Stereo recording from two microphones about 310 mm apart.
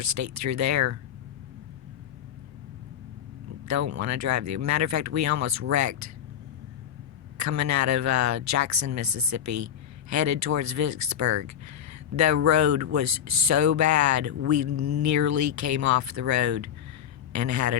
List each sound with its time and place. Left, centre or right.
0.0 s speech: right
3.7 s speech: right
7.3 s speech: right